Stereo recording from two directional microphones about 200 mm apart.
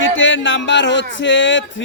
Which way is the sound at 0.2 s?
65° left (ahead or behind).